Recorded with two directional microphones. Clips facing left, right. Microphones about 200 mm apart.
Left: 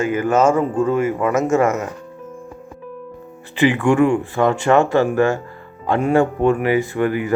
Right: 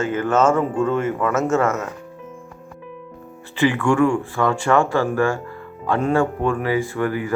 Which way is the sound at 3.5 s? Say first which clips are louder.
Left 3 dB; 15° left (ahead or behind).